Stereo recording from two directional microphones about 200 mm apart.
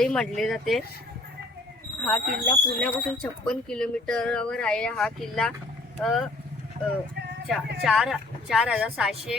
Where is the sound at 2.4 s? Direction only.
5° left (ahead or behind).